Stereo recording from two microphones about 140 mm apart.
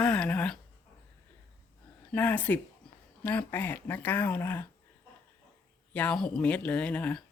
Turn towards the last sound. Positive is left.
turn(degrees=10)  # may be behind; listen again after turning